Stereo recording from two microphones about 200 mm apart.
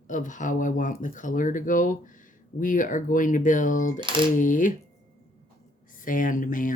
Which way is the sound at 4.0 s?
25° right (ahead or behind).